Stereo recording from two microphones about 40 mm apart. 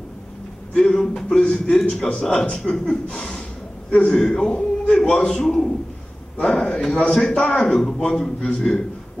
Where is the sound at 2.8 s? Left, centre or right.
Left.